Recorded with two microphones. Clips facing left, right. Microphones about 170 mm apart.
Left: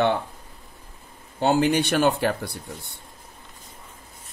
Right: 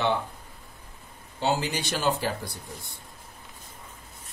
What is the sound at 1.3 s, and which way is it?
Speech, 55° left (ahead or behind).